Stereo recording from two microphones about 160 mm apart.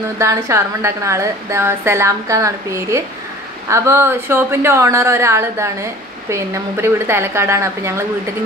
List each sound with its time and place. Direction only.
0.2 s a woman's voice: 20° right (ahead or behind)